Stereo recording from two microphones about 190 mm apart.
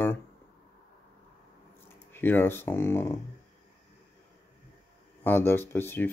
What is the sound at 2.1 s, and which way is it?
Speech, 10° left (ahead or behind).